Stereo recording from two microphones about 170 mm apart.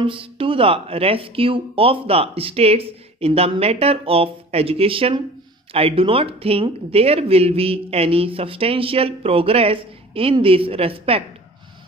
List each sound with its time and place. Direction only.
0.0 s speech: 30° right (ahead or behind)